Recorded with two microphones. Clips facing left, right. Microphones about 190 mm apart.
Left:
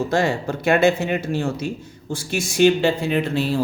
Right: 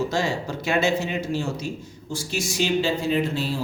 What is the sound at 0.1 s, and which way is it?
Speech, 55° left (ahead or behind).